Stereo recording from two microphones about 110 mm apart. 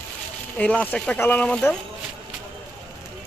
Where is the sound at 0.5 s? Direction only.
10° left (ahead or behind).